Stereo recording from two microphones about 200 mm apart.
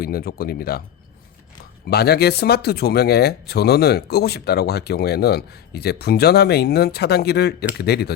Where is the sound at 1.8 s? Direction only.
50° left (ahead or behind).